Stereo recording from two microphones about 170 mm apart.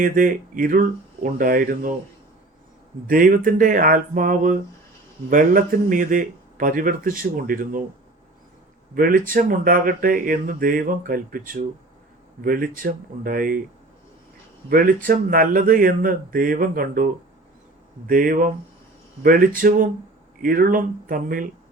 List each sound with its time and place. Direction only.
0.0 s a man's voice: 55° right (ahead or behind)
3.1 s a man's voice: 55° right (ahead or behind)
9.0 s speech: 55° right (ahead or behind)
14.7 s a man's voice: 55° right (ahead or behind)